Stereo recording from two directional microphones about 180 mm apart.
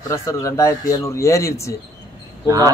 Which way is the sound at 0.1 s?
15° left (ahead or behind).